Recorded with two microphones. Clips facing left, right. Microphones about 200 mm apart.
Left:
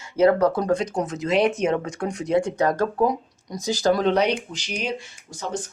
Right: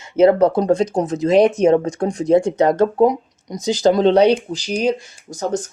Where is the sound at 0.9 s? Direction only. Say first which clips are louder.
Right 7 dB; 30° right (ahead or behind).